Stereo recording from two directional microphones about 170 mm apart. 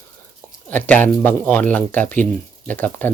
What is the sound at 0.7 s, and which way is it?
Speech, 10° left (ahead or behind).